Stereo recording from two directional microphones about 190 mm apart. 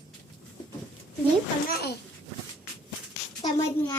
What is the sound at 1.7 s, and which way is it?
Speech, 55° left (ahead or behind).